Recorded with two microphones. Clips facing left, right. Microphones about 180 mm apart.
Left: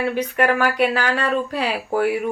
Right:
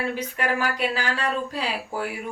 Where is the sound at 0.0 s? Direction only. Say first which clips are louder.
Left 7 dB; 65° left (ahead or behind).